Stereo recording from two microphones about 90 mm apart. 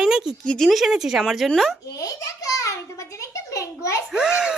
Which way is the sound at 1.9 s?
40° left (ahead or behind).